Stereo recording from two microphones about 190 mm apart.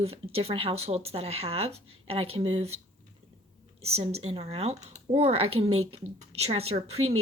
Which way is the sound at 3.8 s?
30° right (ahead or behind).